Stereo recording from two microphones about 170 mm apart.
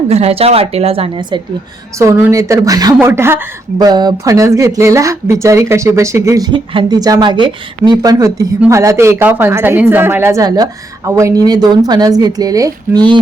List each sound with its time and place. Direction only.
0.1 s a woman's voice: 40° right (ahead or behind)
2.0 s a woman's voice: 15° right (ahead or behind)